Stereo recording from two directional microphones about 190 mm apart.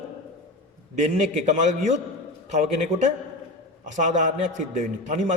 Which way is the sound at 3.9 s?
40° right (ahead or behind).